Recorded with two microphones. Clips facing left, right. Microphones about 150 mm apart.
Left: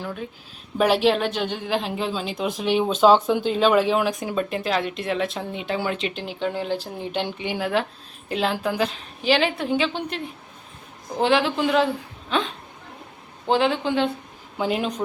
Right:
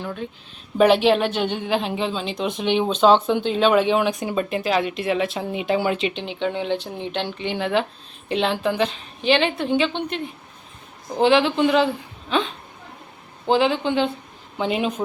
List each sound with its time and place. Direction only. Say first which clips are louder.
0.0 s a woman's voice: right 2 dB; 5° left (ahead or behind)